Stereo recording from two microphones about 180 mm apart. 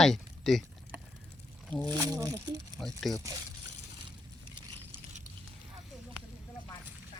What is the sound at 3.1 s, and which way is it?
Speech, centre (ahead or behind).